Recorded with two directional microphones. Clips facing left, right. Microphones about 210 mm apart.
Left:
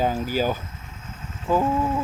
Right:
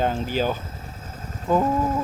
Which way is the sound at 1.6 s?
40° right (ahead or behind).